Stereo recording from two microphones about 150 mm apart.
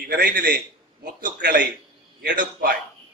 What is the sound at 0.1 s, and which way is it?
A man's voice, 85° right.